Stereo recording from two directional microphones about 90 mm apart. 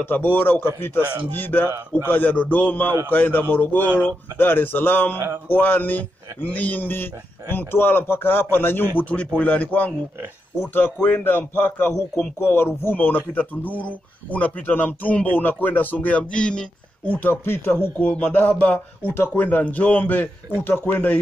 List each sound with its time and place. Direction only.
0.0 s a man's voice: 20° left (ahead or behind)